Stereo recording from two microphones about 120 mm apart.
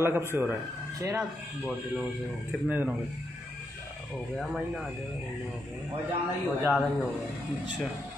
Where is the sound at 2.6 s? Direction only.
15° right (ahead or behind).